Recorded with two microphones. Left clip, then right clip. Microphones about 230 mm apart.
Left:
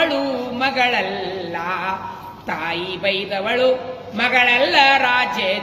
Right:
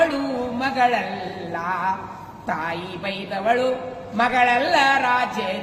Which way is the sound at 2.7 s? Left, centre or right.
Centre.